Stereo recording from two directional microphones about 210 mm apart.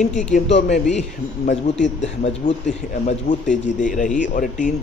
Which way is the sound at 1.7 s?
35° left (ahead or behind).